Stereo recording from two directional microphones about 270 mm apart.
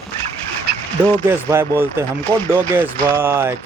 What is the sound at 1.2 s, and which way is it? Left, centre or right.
Speech, centre.